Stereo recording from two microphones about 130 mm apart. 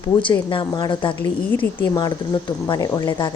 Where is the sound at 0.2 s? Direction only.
40° left (ahead or behind).